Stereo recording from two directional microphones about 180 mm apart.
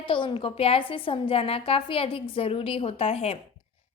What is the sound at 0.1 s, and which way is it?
A woman's voice, 30° left (ahead or behind).